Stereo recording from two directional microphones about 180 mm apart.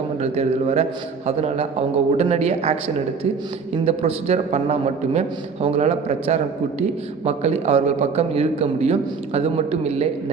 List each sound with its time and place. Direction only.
0.2 s a man's voice: 35° right (ahead or behind)